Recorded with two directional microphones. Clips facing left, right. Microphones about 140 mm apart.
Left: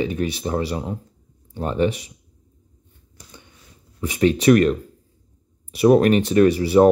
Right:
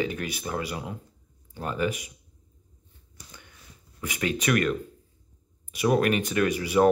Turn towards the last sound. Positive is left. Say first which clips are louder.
# left 9 dB
turn(degrees=35)  # may be behind; listen again after turning